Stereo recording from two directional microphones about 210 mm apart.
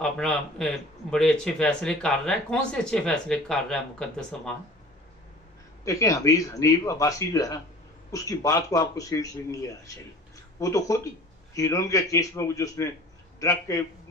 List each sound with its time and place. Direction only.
0.0 s speech: 5° left (ahead or behind)
5.9 s speech: 15° left (ahead or behind)